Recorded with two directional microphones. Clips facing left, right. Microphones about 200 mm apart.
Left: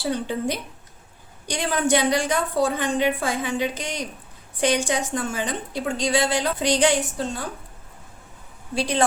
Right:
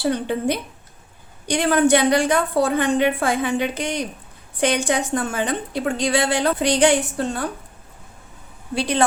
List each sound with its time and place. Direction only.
0.0 s a woman's voice: 60° right (ahead or behind)
8.7 s a woman's voice: 60° right (ahead or behind)